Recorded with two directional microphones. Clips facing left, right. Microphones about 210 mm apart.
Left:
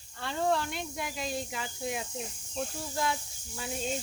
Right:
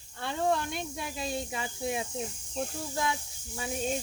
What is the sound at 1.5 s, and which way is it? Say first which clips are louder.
Speech: right 3 dB; 25° right (ahead or behind).